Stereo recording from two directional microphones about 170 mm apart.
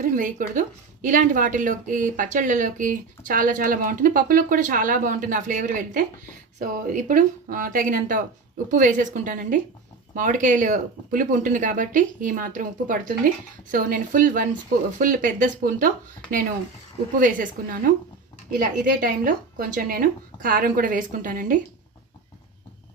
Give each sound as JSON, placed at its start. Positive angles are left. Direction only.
{"t": 0.0, "sound": "speech", "side_deg": -50}
{"t": 17.2, "sound": "speech", "side_deg": -50}